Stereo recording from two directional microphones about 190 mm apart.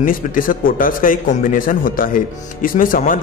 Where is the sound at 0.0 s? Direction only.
45° left (ahead or behind).